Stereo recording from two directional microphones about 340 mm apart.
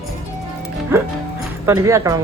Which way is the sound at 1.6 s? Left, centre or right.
Centre.